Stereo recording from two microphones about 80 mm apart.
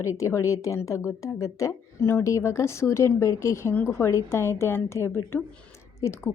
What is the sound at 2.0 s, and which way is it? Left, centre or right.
A woman's voice, left.